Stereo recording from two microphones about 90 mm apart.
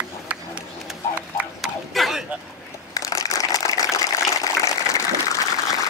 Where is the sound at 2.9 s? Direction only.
40° left (ahead or behind).